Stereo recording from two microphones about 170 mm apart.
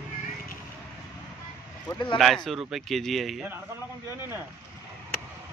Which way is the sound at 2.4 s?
Centre (ahead or behind).